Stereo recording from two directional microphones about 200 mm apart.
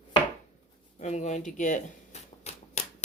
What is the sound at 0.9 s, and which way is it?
Speech, 35° left (ahead or behind).